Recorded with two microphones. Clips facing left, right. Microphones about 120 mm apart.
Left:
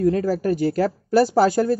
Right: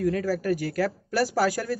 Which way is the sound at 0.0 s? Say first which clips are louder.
Left 6 dB; 30° left (ahead or behind).